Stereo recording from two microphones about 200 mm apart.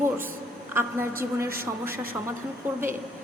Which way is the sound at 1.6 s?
10° right (ahead or behind).